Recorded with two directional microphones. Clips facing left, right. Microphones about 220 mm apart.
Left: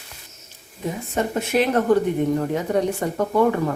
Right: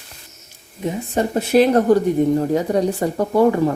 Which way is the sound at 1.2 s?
35° right (ahead or behind).